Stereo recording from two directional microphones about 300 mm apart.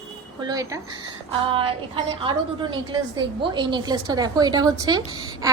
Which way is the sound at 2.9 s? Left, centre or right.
Centre.